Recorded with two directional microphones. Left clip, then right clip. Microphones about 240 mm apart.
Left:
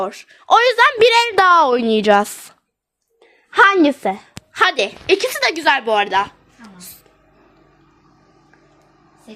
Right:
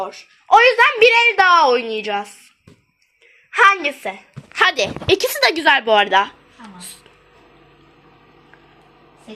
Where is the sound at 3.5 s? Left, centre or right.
Left.